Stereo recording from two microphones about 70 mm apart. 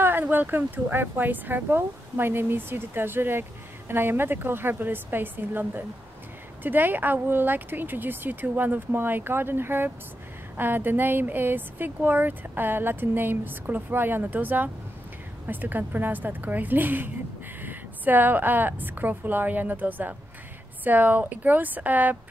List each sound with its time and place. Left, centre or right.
0.0 s speech: right